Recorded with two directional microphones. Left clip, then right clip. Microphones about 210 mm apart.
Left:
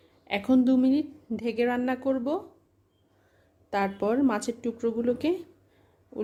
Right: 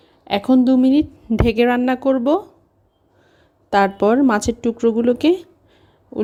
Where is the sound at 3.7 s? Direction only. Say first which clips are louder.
Right 12 dB; 35° right (ahead or behind).